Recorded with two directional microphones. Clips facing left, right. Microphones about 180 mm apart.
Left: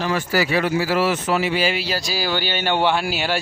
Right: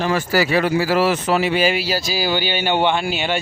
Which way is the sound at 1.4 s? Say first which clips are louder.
Right 3 dB; 55° right (ahead or behind).